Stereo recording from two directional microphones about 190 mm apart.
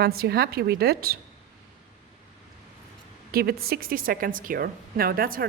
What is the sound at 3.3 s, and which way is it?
A woman's voice, 55° right (ahead or behind).